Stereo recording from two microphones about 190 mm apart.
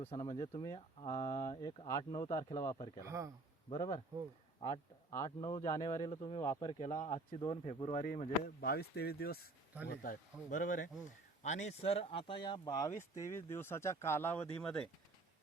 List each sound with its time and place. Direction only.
0.0 s speech: 30° left (ahead or behind)
3.0 s speech: 15° right (ahead or behind)
3.7 s speech: 25° left (ahead or behind)
5.4 s speech: 25° left (ahead or behind)
8.4 s speech: 55° left (ahead or behind); by 14.8 s 5° left (ahead or behind)